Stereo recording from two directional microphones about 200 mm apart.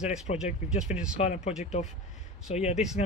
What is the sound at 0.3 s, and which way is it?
Speech, 35° left (ahead or behind).